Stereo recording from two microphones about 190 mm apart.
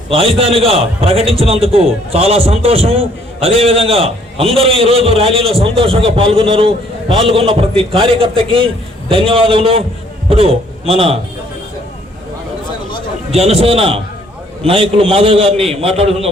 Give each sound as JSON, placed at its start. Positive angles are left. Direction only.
{"t": 0.1, "sound": "a man's voice", "side_deg": -30}
{"t": 13.3, "sound": "a man's voice", "side_deg": -35}